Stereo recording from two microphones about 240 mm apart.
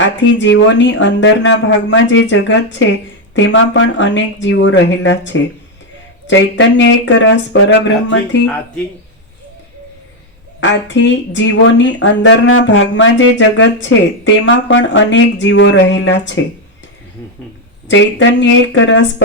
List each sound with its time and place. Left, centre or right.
0.0 s speech: left
6.6 s speech: left
10.6 s speech: left
17.8 s speech: left